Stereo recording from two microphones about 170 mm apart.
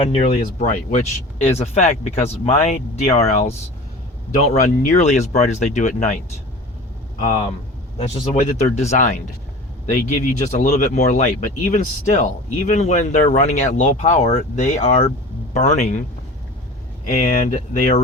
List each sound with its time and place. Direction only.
0.0 s speech: 35° left (ahead or behind)
7.9 s speech: 35° left (ahead or behind)
17.2 s speech: 50° left (ahead or behind)